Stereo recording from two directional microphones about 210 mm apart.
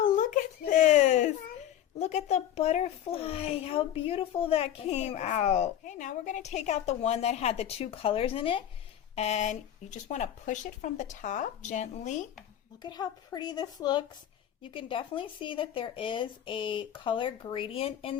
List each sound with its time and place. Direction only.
0.0 s a sound: 40° left (ahead or behind)
2.0 s speech: 30° left (ahead or behind)
12.8 s speech: 20° left (ahead or behind)